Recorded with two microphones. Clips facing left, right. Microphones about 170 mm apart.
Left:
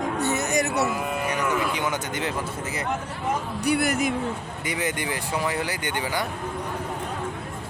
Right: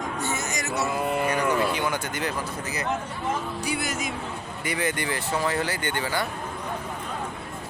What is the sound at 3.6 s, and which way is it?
Speech, 60° left (ahead or behind).